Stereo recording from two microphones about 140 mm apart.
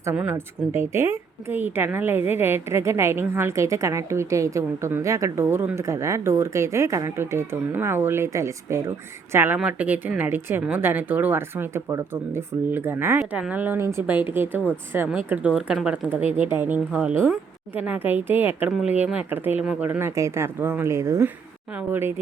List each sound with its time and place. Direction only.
0.0 s a woman's voice: 15° right (ahead or behind)